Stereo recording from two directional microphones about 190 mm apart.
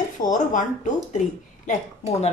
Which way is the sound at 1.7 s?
35° left (ahead or behind).